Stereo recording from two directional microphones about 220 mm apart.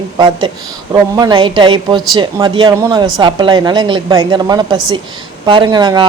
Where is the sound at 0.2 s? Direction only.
20° right (ahead or behind).